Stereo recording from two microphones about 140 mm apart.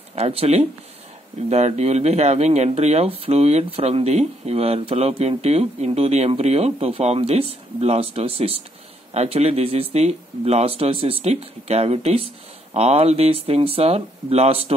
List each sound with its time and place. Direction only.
0.1 s speech: 45° right (ahead or behind)